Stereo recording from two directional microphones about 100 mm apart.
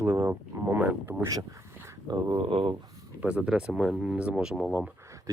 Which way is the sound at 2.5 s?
65° right (ahead or behind).